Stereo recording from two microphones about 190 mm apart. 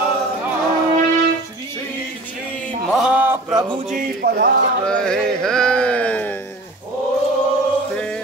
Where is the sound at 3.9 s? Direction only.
55° right (ahead or behind).